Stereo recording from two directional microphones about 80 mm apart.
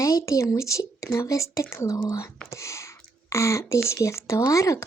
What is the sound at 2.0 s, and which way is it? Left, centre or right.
Speech, left.